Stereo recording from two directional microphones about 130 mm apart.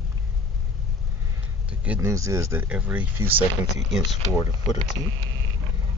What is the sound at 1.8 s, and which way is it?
Speech, 10° right (ahead or behind).